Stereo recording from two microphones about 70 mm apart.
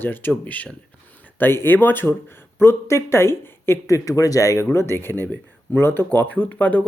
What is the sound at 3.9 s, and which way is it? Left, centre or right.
Speech, left.